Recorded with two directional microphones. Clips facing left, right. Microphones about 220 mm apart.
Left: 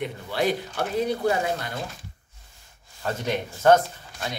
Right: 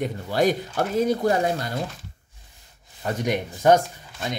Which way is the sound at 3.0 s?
15° right (ahead or behind).